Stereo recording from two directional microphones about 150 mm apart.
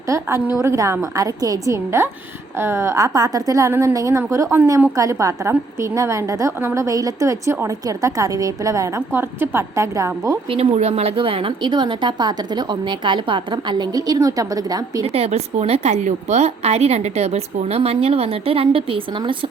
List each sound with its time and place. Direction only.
0.1 s a sound: 15° right (ahead or behind)
0.6 s a woman's voice: 20° right (ahead or behind)
10.5 s a woman's voice: 45° right (ahead or behind); by 15.0 s 25° right (ahead or behind)
15.0 s a woman's voice: 45° right (ahead or behind)